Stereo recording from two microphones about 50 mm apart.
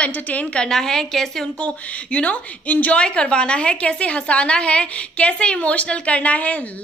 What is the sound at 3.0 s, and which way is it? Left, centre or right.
A woman's voice, centre.